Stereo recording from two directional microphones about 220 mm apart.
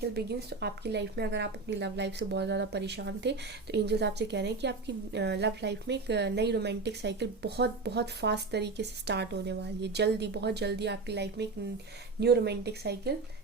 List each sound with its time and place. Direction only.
0.1 s a woman's voice: 50° right (ahead or behind)